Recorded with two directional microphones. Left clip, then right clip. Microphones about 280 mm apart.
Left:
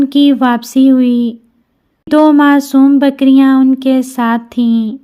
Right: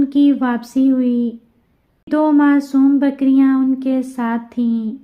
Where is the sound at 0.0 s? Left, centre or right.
Left.